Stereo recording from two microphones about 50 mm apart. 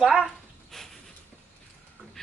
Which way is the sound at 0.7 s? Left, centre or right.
Centre.